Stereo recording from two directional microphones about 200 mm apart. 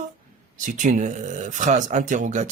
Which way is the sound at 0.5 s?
40° right (ahead or behind).